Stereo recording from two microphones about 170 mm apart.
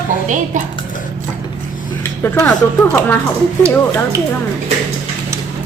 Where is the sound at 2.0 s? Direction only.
20° left (ahead or behind).